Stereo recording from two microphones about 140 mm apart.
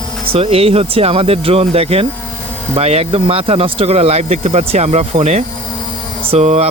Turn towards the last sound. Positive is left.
turn(degrees=-50)  # may be behind; listen again after turning